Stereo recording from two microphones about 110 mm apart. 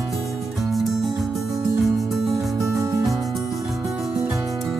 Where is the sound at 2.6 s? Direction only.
30° right (ahead or behind).